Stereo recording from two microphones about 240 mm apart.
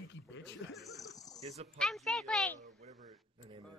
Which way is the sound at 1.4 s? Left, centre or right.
Right.